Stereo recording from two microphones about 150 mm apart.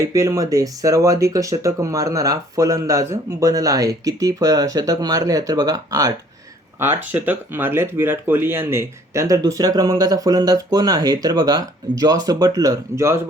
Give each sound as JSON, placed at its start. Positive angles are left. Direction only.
{"t": 0.0, "sound": "speech", "side_deg": -20}
{"t": 6.7, "sound": "speech", "side_deg": -15}